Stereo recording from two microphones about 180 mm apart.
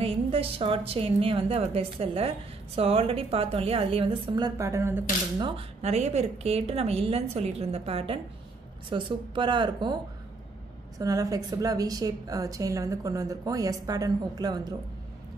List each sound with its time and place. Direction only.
0.0 s a woman's voice: 30° right (ahead or behind); by 5.0 s 15° right (ahead or behind)
5.4 s a woman's voice: 30° right (ahead or behind)
11.0 s a woman's voice: 20° right (ahead or behind)